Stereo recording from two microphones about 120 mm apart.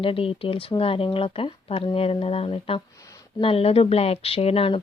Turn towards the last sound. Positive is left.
turn(degrees=50)  # may be behind; listen again after turning